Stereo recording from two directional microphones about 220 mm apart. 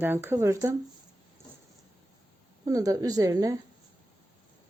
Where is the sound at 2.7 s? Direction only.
15° right (ahead or behind).